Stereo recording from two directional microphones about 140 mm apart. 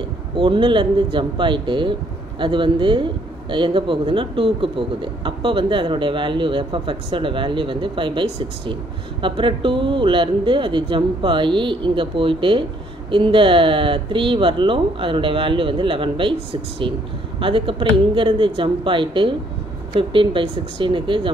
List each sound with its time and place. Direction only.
0.4 s speech: 35° right (ahead or behind)